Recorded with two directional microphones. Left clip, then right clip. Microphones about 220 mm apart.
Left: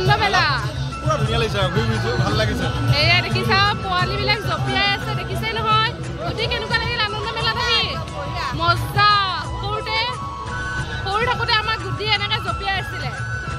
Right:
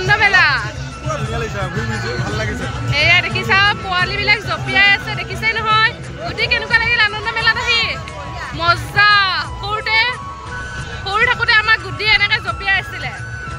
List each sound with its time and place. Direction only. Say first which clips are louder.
0.0 s music: right 5 dB; centre (ahead or behind)
2.9 s speech: right 5 dB; centre (ahead or behind)
8.5 s a sound: right 5 dB; centre (ahead or behind)
11.1 s speech: right 6 dB; 5° left (ahead or behind)